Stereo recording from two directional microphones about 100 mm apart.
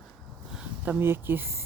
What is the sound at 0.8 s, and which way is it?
Speech, 20° right (ahead or behind).